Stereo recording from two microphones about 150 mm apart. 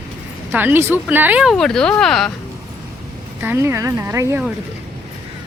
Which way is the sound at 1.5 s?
5° left (ahead or behind).